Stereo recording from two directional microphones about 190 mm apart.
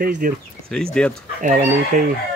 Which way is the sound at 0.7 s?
5° left (ahead or behind).